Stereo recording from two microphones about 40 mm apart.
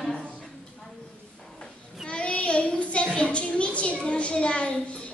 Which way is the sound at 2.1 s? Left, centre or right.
Left.